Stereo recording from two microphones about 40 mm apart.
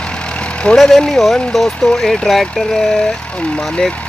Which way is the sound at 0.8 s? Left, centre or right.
Centre.